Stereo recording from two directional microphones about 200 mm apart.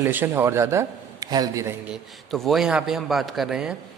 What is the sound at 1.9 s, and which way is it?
A man's voice, centre (ahead or behind).